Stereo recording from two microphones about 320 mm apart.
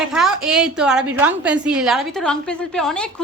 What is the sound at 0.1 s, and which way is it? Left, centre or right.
A woman's voice, centre.